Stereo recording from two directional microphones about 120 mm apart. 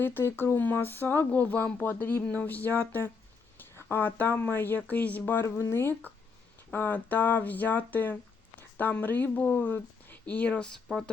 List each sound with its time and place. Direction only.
0.0 s speech: 20° left (ahead or behind); by 11.1 s centre (ahead or behind)